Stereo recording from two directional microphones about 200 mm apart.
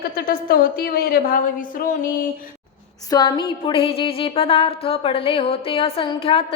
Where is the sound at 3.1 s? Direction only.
20° left (ahead or behind).